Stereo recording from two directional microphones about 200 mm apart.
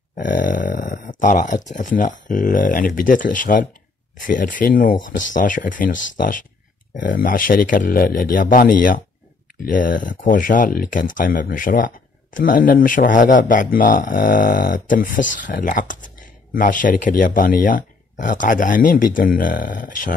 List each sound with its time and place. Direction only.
0.2 s speech: 45° left (ahead or behind)